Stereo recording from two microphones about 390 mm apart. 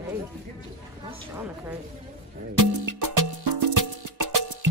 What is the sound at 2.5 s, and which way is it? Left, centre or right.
Music, right.